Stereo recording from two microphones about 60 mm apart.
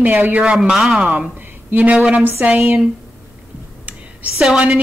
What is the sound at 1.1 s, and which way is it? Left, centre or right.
A woman's voice, right.